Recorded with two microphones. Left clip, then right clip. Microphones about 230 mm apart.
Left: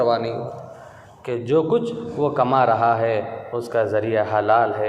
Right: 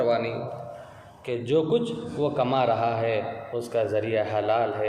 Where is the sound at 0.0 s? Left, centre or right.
Centre.